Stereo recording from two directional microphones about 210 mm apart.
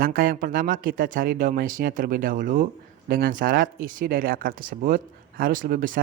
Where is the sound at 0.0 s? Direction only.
45° right (ahead or behind).